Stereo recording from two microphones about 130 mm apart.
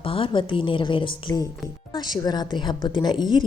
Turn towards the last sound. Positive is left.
turn(degrees=35)  # may be behind; listen again after turning